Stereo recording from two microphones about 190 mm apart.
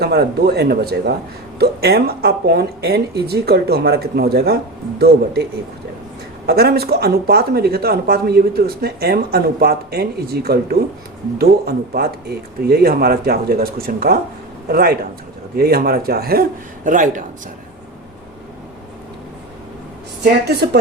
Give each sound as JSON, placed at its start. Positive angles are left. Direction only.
{"t": 0.0, "sound": "speech", "side_deg": -60}
{"t": 6.4, "sound": "speech", "side_deg": -55}